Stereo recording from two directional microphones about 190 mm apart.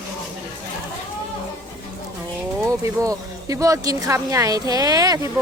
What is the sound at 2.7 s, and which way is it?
Speech, 15° right (ahead or behind).